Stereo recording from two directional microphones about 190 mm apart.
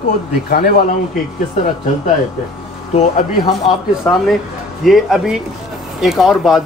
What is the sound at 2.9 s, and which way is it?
Speech, 30° left (ahead or behind).